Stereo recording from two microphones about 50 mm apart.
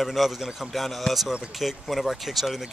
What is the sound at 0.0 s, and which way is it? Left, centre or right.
Speech, centre.